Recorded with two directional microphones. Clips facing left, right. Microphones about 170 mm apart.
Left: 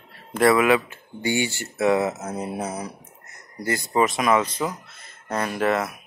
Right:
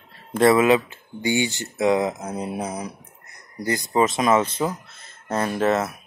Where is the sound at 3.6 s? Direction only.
20° right (ahead or behind).